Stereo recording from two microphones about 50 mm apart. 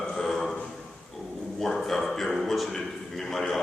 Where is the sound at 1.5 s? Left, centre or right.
Centre.